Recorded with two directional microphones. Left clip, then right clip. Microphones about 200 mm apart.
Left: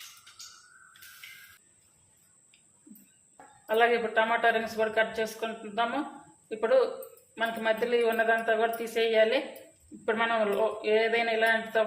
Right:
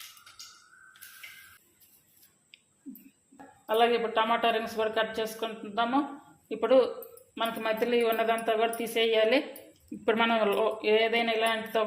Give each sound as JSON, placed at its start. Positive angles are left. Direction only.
{"t": 3.7, "sound": "a man's voice", "side_deg": -25}
{"t": 7.3, "sound": "speech", "side_deg": -30}